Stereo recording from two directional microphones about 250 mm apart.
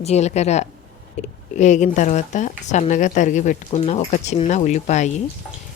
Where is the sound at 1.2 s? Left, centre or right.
Left.